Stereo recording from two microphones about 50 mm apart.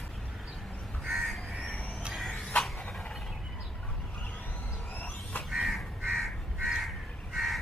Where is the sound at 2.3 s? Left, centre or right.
Centre.